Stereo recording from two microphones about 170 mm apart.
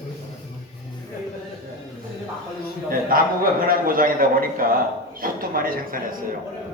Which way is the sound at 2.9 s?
55° right (ahead or behind).